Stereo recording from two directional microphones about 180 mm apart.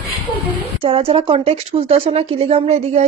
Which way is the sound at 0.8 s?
30° right (ahead or behind).